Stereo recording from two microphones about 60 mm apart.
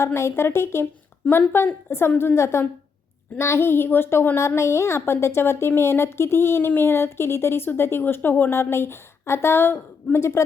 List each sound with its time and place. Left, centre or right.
0.0 s a woman's voice: left